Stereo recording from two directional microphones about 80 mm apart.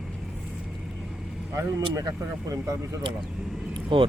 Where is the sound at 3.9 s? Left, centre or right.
Right.